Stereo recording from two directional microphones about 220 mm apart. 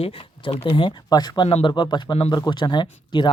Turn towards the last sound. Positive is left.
turn(degrees=20)  # may be behind; listen again after turning